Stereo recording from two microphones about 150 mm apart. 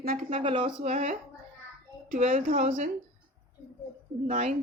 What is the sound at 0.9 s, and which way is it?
Speech, 50° right (ahead or behind).